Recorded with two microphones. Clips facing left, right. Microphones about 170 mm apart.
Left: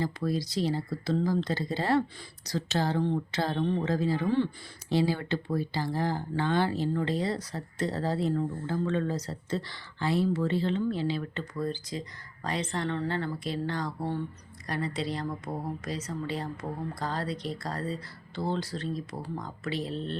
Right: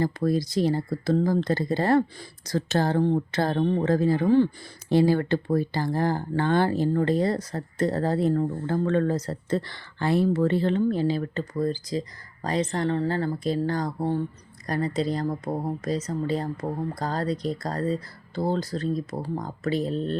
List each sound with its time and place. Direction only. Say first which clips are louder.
0.0 s speech: right 6 dB; 50° right (ahead or behind)